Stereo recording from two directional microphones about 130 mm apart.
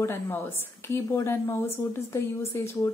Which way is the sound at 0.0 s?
20° left (ahead or behind).